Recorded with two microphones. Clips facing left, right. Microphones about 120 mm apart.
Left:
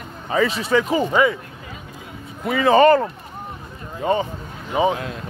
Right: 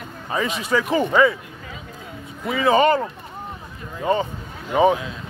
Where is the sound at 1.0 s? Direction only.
20° left (ahead or behind).